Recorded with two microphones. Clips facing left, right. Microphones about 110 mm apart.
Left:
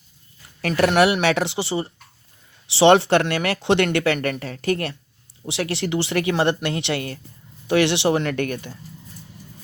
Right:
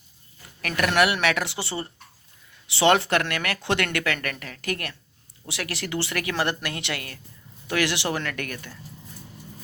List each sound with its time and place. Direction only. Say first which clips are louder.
0.6 s speech: left 5 dB; 30° left (ahead or behind)